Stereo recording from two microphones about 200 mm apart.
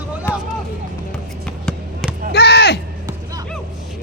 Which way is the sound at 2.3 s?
55° left (ahead or behind).